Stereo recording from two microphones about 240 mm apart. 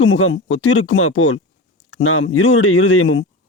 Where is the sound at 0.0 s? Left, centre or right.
Left.